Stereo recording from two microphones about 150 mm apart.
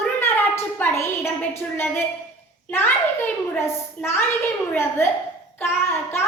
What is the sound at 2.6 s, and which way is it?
A child's voice, 15° left (ahead or behind).